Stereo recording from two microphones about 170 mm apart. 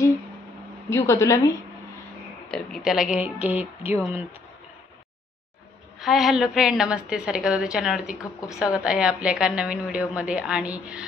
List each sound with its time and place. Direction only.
0.8 s a woman's voice: 15° left (ahead or behind)
2.5 s a woman's voice: centre (ahead or behind)
3.2 s a sound: 10° right (ahead or behind)
5.9 s a woman's voice: centre (ahead or behind)